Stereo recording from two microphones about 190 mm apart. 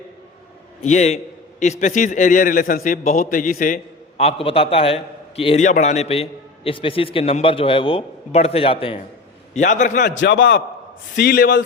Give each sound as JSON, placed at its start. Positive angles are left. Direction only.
{"t": 0.8, "sound": "a man's voice", "side_deg": 40}
{"t": 4.2, "sound": "a man's voice", "side_deg": 30}
{"t": 9.6, "sound": "a man's voice", "side_deg": 40}
{"t": 10.0, "sound": "a man's voice", "side_deg": 70}
{"t": 11.1, "sound": "a man's voice", "side_deg": 60}